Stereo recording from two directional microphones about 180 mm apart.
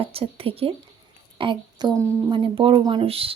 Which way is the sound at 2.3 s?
25° right (ahead or behind).